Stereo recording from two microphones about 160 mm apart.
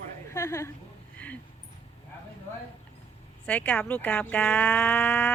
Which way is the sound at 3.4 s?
10° left (ahead or behind).